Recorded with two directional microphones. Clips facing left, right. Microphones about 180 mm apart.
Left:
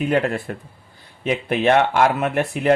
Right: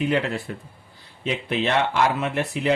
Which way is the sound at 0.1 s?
50° left (ahead or behind).